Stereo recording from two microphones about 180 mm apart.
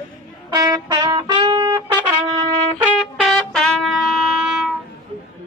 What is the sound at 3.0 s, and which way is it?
Music, centre (ahead or behind).